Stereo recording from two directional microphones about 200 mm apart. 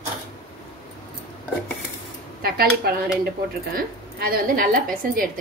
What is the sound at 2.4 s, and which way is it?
Speech, 50° right (ahead or behind).